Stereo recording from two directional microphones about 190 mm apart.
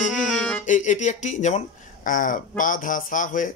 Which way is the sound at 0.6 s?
40° left (ahead or behind).